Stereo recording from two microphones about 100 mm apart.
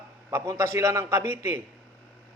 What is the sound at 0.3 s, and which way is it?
A man's voice, 30° right (ahead or behind).